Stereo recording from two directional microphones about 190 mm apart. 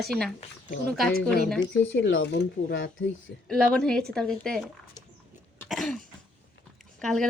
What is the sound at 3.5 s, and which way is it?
Speech, 5° left (ahead or behind).